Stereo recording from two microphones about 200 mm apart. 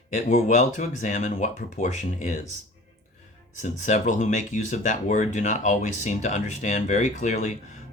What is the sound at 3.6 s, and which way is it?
Speech, 35° left (ahead or behind).